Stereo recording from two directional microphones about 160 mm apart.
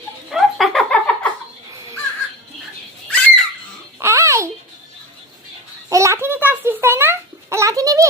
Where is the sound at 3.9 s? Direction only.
15° right (ahead or behind).